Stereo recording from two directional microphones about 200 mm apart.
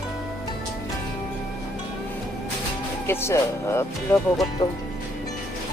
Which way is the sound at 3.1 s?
15° left (ahead or behind).